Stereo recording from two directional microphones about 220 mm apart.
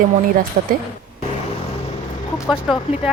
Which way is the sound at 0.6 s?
40° right (ahead or behind).